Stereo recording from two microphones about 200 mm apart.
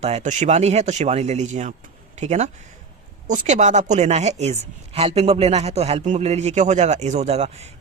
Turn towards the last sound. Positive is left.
turn(degrees=-30)  # may be behind; listen again after turning